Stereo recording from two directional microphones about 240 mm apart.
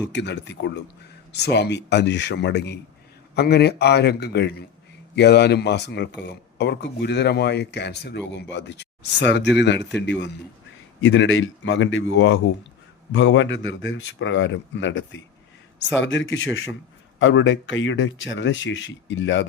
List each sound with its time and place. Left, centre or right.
0.1 s speech: left